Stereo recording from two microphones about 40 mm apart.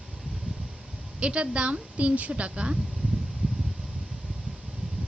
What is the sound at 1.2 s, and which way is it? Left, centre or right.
A woman's voice, right.